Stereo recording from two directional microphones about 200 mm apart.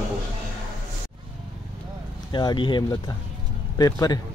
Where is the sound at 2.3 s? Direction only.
20° left (ahead or behind).